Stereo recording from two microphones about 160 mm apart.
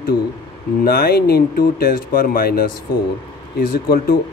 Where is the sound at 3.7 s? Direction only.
70° left (ahead or behind).